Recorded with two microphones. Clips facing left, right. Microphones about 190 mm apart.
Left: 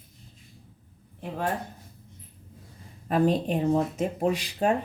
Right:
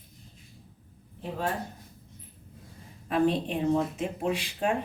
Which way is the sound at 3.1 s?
40° left (ahead or behind).